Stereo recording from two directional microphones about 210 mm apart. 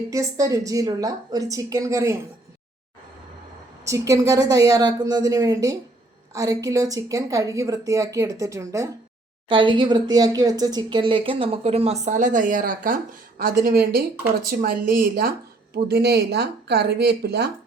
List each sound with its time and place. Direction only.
0.1 s a woman's voice: 15° right (ahead or behind)
3.8 s a woman's voice: 15° right (ahead or behind); by 17.5 s 50° right (ahead or behind)